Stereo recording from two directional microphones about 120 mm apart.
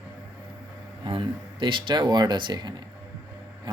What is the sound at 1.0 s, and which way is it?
Speech, 40° right (ahead or behind).